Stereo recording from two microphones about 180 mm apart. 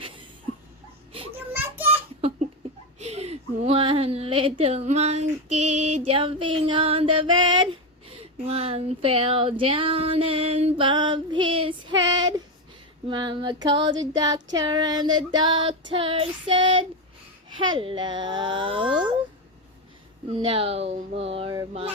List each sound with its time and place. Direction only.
1.5 s a sound: 10° right (ahead or behind)
3.0 s speech: 35° right (ahead or behind)
20.3 s speech: 30° right (ahead or behind)